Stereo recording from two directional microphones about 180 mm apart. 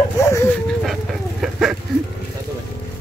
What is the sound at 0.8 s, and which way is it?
Speech, centre (ahead or behind).